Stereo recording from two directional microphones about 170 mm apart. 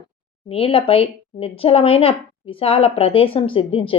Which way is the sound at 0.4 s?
35° left (ahead or behind).